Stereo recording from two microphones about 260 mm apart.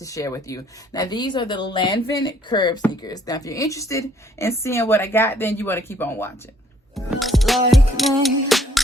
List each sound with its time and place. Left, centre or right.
0.0 s a woman's voice: centre
6.9 s music: centre